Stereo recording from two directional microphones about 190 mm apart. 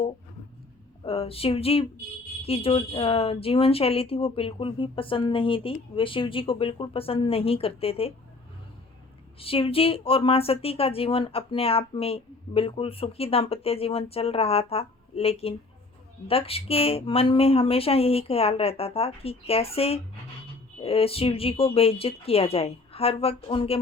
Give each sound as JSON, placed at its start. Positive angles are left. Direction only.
{"t": 1.0, "sound": "a woman's voice", "side_deg": 30}
{"t": 9.4, "sound": "a woman's voice", "side_deg": 30}